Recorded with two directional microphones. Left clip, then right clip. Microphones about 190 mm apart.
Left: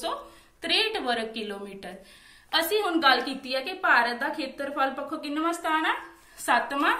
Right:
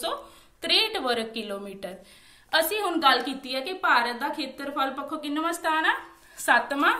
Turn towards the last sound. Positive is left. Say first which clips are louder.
# right 2 dB
turn(degrees=-60)  # may be behind; listen again after turning